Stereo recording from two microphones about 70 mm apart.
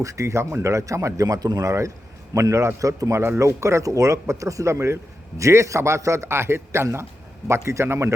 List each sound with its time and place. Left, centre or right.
0.0 s a man's voice: right
2.3 s a man's voice: right